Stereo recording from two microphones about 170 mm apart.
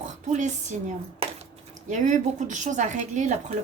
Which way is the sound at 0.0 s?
45° right (ahead or behind).